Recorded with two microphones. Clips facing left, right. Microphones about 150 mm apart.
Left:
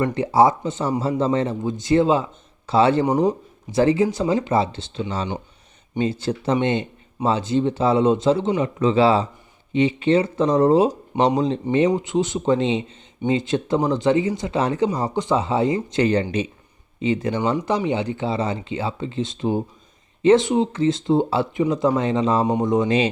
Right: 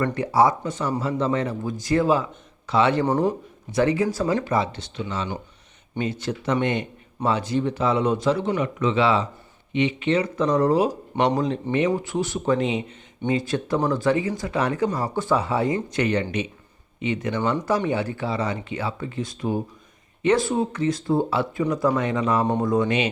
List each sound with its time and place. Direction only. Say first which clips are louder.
0.0 s speech: left 3 dB; 25° left (ahead or behind)
3.1 s speech: left 3 dB; 20° left (ahead or behind)
11.1 s speech: left 3 dB; 10° left (ahead or behind)